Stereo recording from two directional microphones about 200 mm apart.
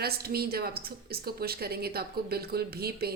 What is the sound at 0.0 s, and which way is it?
A woman's voice, 50° right (ahead or behind).